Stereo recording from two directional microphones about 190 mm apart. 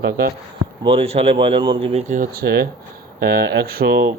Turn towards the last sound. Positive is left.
turn(degrees=-50)  # may be behind; listen again after turning